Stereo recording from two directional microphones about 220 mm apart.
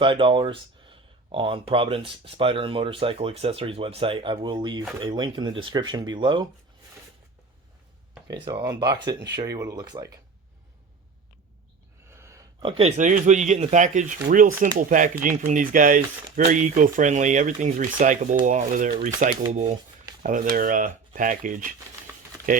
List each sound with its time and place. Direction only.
0.0 s speech: 25° right (ahead or behind)
8.4 s speech: 20° right (ahead or behind)
12.1 s a sound: 10° right (ahead or behind)
12.7 s speech: 30° right (ahead or behind)
19.6 s shuffling cards: 20° right (ahead or behind)
20.2 s speech: 35° right (ahead or behind)